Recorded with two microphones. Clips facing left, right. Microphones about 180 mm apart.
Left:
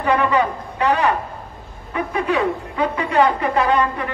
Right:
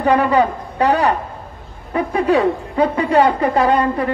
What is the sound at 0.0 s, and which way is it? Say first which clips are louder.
A woman's voice: right 4 dB; 40° right (ahead or behind).